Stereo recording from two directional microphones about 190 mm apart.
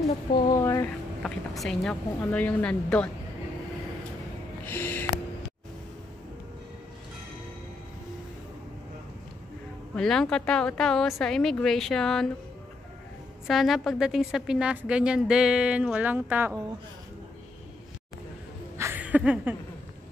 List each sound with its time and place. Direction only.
0.3 s speech: 15° left (ahead or behind)
1.2 s a woman's voice: centre (ahead or behind)
4.6 s a sound: 10° left (ahead or behind)
9.9 s a woman's voice: 5° left (ahead or behind)
13.5 s a woman's voice: centre (ahead or behind)
18.8 s a sound: 10° right (ahead or behind)